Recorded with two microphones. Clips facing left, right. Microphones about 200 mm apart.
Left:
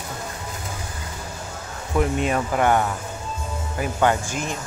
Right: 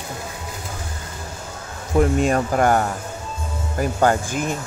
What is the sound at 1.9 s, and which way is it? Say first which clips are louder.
Speech: right 4 dB; 40° right (ahead or behind).